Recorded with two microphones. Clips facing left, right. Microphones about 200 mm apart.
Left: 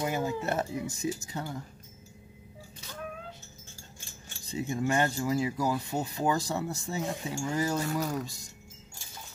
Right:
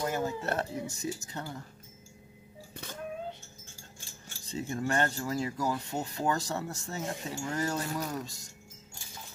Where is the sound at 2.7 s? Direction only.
55° right (ahead or behind).